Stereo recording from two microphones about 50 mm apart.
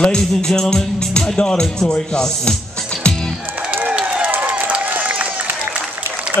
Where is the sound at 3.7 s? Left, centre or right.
Right.